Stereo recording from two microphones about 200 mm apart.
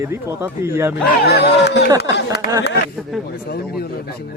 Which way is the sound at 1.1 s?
55° left (ahead or behind).